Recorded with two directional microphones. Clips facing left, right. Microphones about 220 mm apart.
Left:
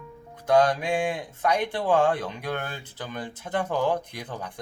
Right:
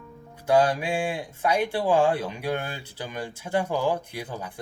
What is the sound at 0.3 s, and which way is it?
Speech, 10° right (ahead or behind).